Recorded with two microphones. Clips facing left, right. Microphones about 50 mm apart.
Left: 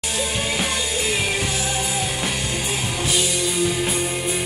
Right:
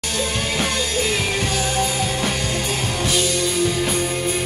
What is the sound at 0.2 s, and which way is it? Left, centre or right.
Music, centre.